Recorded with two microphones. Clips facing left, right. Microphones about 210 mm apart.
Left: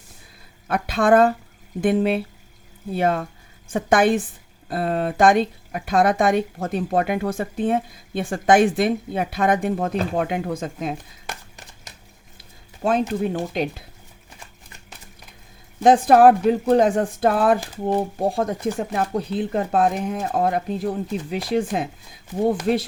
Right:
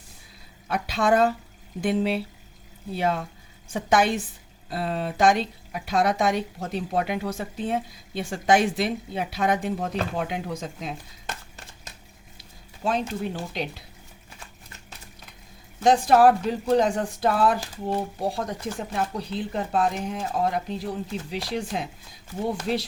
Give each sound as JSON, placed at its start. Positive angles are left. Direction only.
{"t": 0.7, "sound": "speech", "side_deg": 55}
{"t": 13.5, "sound": "speech", "side_deg": 50}
{"t": 15.8, "sound": "speech", "side_deg": 55}